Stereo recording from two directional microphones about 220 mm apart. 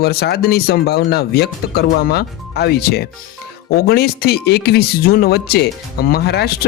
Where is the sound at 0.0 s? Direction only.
45° left (ahead or behind).